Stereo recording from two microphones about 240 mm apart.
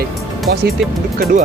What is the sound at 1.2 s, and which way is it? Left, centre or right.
Speech, right.